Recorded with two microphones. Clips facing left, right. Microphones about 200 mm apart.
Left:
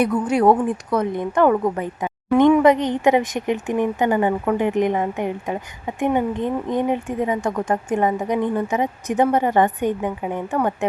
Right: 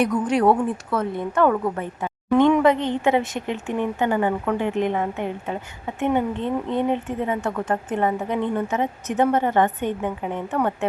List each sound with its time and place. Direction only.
0.0 s speech: 10° left (ahead or behind)